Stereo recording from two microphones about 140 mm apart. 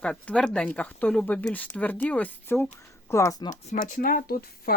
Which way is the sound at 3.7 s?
90° left.